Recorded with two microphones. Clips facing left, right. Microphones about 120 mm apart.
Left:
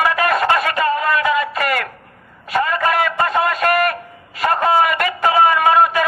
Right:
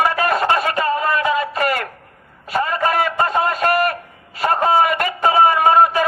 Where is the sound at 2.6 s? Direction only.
30° right (ahead or behind).